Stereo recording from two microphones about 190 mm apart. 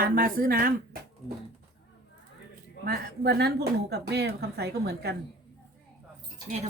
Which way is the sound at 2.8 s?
55° right (ahead or behind).